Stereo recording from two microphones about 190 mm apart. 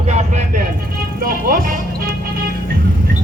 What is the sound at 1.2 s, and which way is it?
Speech, 50° right (ahead or behind).